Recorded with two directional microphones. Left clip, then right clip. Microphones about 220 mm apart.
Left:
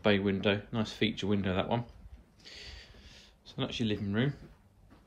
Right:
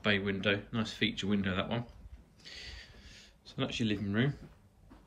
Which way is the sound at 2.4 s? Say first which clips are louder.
Right 1 dB; 10° left (ahead or behind).